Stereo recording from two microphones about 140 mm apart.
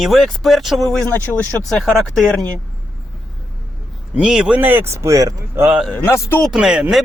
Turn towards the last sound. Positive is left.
turn(degrees=-5)  # may be behind; listen again after turning